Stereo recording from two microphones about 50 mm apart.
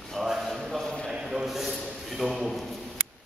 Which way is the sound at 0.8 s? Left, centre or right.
Centre.